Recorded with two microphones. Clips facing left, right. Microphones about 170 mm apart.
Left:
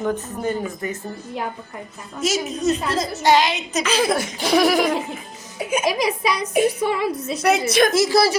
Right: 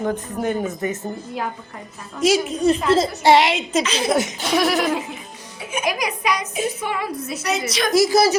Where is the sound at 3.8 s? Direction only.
55° left (ahead or behind).